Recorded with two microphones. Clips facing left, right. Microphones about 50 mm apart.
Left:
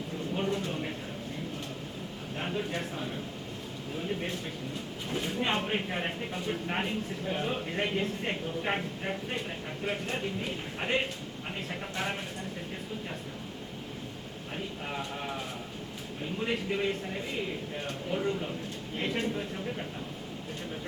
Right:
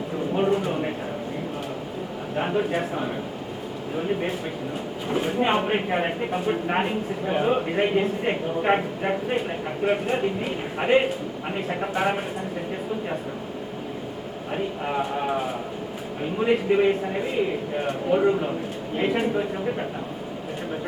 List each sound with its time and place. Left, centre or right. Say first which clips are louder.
0.3 s a sound: right 9 dB; right
2.3 s a man's voice: right 10 dB; right
14.5 s speech: right 10 dB; right